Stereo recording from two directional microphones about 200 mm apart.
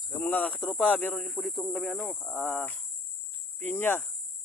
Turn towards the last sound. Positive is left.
turn(degrees=10)  # may be behind; listen again after turning